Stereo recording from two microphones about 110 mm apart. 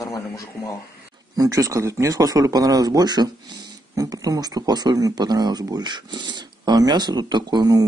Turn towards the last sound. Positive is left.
turn(degrees=-40)  # may be behind; listen again after turning